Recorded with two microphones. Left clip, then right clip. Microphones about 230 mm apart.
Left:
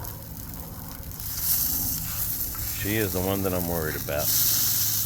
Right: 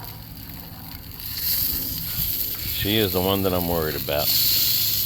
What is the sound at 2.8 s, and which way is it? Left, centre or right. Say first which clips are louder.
Speech: right 6 dB; right.